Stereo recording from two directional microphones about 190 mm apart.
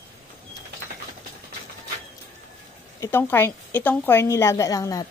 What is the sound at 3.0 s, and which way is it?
A woman's voice, 10° left (ahead or behind).